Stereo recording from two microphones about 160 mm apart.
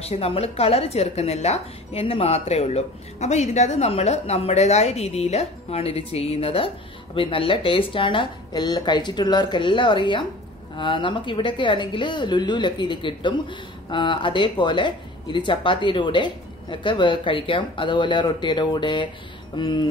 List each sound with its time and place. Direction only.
0.0 s speech: 40° left (ahead or behind)